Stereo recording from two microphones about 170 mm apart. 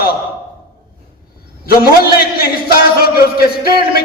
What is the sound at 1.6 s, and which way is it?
A man's voice, 60° left (ahead or behind).